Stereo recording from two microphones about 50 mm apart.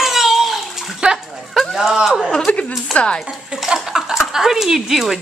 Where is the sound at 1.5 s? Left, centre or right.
Centre.